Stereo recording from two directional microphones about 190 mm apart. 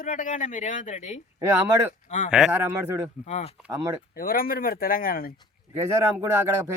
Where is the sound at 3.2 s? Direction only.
35° left (ahead or behind).